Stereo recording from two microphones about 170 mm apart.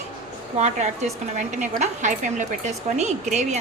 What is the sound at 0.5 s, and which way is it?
A woman's voice, 45° right (ahead or behind).